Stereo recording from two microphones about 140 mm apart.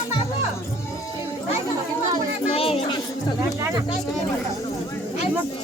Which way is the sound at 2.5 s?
40° left (ahead or behind).